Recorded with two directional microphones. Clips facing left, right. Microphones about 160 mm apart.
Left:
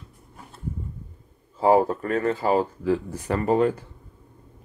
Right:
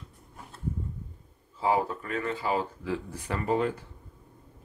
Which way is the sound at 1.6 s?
45° left (ahead or behind).